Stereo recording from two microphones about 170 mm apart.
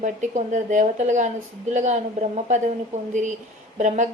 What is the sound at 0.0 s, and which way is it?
A woman's voice, 45° right (ahead or behind).